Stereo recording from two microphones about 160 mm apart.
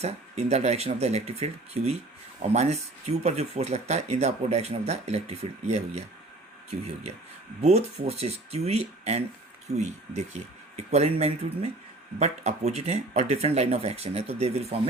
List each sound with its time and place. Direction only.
0.0 s speech: 40° right (ahead or behind)
7.6 s speech: 40° right (ahead or behind)